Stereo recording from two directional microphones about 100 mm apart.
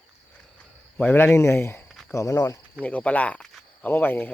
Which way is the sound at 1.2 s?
25° left (ahead or behind).